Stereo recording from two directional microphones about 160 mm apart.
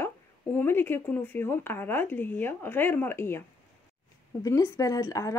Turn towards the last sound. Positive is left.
turn(degrees=20)  # may be behind; listen again after turning